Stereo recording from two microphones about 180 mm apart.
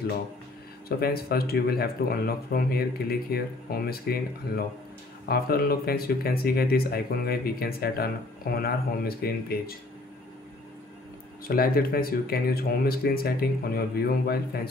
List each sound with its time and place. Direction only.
0.8 s speech: 60° left (ahead or behind)
5.3 s speech: 60° left (ahead or behind)
11.4 s speech: 55° left (ahead or behind)